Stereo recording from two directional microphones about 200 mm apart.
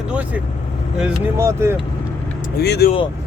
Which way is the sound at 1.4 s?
15° right (ahead or behind).